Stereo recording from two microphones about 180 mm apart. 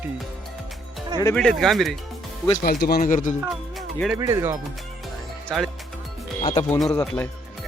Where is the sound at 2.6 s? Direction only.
60° left (ahead or behind).